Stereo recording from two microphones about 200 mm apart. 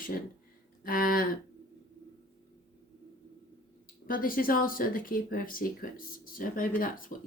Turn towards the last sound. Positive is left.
turn(degrees=45)  # may be behind; listen again after turning